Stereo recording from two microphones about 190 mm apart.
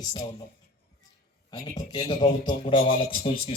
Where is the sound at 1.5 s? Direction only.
20° left (ahead or behind).